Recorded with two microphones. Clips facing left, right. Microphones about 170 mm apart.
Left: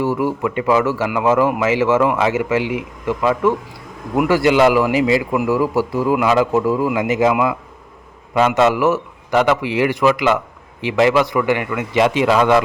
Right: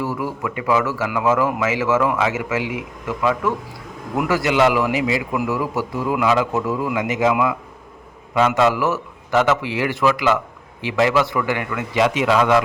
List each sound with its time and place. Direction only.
0.0 s speech: 25° left (ahead or behind)
4.3 s a man's voice: 30° left (ahead or behind)
8.4 s a man's voice: 25° left (ahead or behind)
12.0 s a man's voice: 30° left (ahead or behind)